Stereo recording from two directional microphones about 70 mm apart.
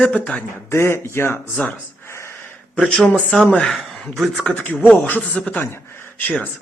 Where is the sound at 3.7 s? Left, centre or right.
Centre.